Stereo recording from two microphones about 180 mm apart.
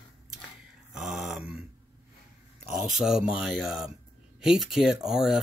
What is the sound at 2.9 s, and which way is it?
Speech, 5° right (ahead or behind).